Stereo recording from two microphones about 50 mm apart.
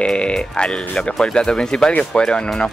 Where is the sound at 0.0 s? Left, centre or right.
Centre.